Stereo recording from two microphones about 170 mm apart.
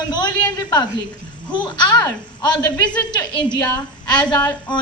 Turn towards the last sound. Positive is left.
turn(degrees=25)  # may be behind; listen again after turning